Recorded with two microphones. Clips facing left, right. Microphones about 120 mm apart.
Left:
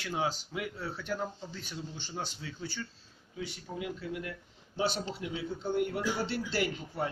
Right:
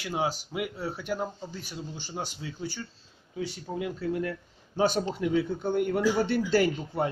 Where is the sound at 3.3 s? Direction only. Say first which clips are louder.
Right 6 dB; 35° right (ahead or behind).